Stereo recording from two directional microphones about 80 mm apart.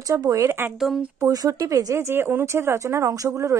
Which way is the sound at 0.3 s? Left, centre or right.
Right.